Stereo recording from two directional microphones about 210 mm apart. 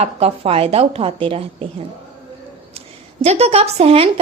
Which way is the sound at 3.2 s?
30° right (ahead or behind).